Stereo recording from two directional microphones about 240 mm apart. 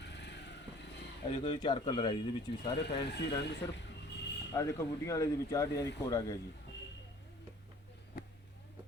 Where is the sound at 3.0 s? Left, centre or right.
Left.